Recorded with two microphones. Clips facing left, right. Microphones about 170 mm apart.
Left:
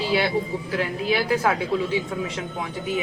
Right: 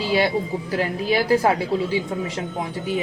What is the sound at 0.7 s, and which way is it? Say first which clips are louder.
Speech: right 2 dB; 35° right (ahead or behind).